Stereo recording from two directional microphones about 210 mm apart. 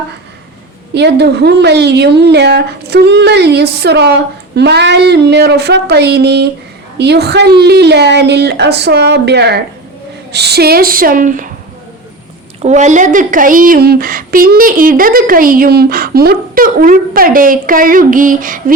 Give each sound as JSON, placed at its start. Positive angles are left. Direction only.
{"t": 0.9, "sound": "speech", "side_deg": -55}
{"t": 12.6, "sound": "speech", "side_deg": -35}